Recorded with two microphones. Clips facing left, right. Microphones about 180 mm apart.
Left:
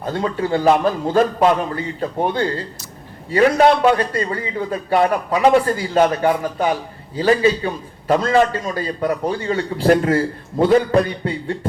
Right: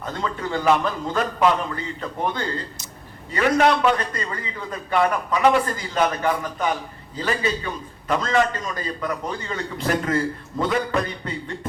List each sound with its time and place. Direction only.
0.0 s a man's voice: 30° left (ahead or behind)